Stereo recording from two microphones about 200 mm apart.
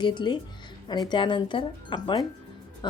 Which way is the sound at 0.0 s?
25° left (ahead or behind).